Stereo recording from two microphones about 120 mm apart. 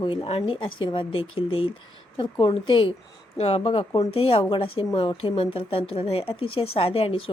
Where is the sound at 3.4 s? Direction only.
55° left (ahead or behind).